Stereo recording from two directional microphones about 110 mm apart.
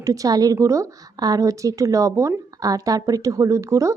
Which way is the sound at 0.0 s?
30° right (ahead or behind).